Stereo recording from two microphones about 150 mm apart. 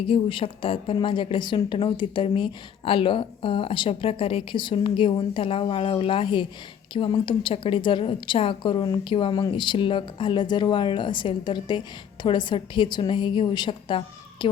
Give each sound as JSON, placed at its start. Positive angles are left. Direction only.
{"t": 0.1, "sound": "a woman's voice", "side_deg": 35}